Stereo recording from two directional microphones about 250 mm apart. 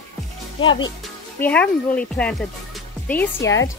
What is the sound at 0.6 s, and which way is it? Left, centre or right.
Speech, centre.